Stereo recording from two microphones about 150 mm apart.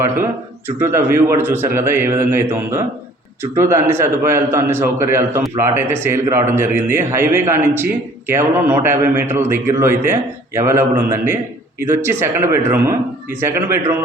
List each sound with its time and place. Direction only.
0.8 s a man's voice: 15° right (ahead or behind)